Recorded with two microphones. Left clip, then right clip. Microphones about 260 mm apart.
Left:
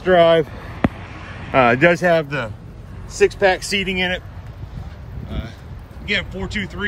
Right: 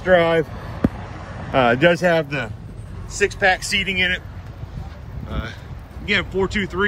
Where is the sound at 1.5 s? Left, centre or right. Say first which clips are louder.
Left 2 dB; centre.